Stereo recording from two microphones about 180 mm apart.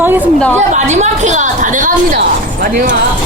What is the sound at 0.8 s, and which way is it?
A woman's voice, 40° right (ahead or behind).